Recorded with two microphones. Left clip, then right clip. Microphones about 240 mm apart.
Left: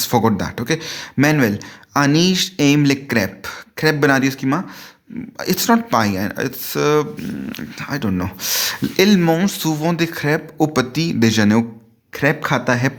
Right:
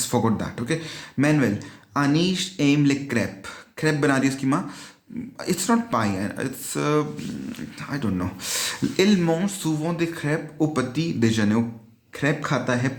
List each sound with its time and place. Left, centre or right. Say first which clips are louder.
0.0 s speech: left 7 dB; left